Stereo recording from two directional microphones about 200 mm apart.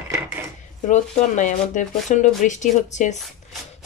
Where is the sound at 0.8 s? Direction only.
35° left (ahead or behind).